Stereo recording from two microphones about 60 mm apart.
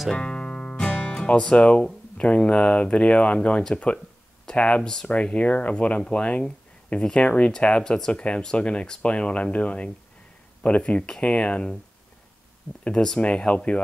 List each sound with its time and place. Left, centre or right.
0.1 s music: centre
1.2 s speech: centre
12.8 s speech: centre